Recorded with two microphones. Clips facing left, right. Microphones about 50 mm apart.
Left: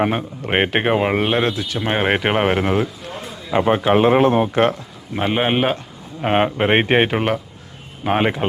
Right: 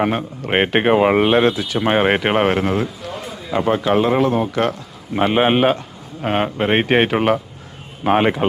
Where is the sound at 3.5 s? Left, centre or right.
Left.